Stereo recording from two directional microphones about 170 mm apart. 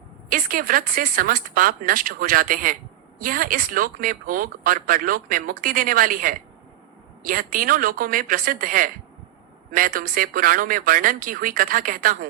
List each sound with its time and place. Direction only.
0.3 s speech: 55° right (ahead or behind)